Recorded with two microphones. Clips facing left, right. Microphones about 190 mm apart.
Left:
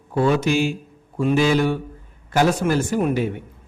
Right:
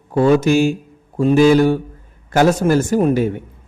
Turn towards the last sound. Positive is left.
turn(degrees=-45)  # may be behind; listen again after turning